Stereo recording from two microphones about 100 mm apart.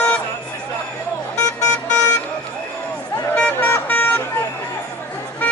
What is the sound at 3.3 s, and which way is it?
Vehicle, 15° left (ahead or behind).